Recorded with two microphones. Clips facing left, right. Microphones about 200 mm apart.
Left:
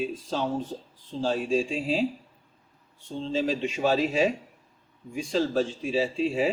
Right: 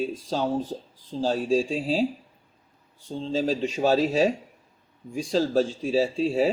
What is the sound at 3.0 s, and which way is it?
Speech, 35° right (ahead or behind).